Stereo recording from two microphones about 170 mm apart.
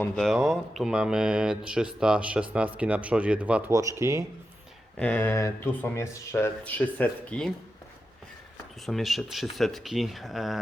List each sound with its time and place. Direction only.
0.0 s speech: centre (ahead or behind)
3.7 s speech: 20° right (ahead or behind)
4.9 s speech: 10° left (ahead or behind)
8.9 s speech: centre (ahead or behind)